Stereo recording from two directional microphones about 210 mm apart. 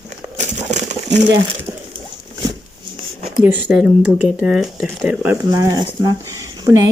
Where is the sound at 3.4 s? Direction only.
10° right (ahead or behind).